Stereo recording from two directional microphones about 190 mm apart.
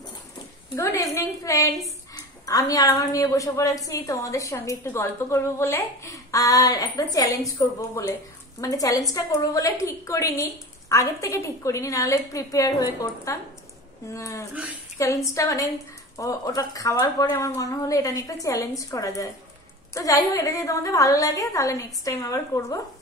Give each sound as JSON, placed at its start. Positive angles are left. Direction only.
{"t": 0.7, "sound": "a woman's voice", "side_deg": 15}